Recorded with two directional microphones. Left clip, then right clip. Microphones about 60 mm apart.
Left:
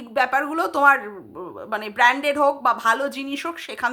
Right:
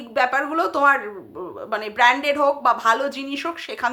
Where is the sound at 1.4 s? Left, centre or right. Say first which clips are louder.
Right 2 dB; left.